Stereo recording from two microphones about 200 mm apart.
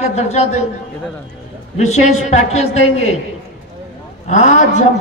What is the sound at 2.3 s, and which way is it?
Speech, 35° left (ahead or behind).